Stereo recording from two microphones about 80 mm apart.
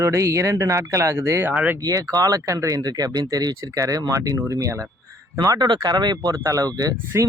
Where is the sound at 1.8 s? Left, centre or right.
Right.